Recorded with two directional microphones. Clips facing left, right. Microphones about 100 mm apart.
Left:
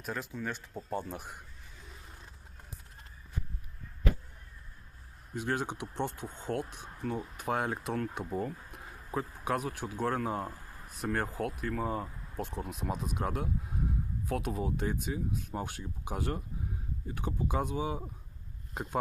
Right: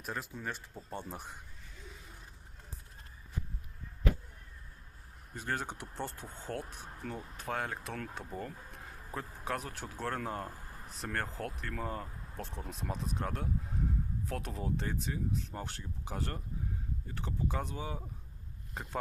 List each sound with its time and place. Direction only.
0.0 s speech: centre (ahead or behind)
0.7 s speech: 30° left (ahead or behind)
0.9 s speech: centre (ahead or behind)
5.3 s speech: 15° left (ahead or behind)